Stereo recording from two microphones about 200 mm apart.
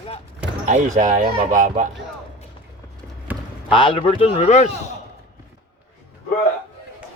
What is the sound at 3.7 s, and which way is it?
Speech, 25° left (ahead or behind).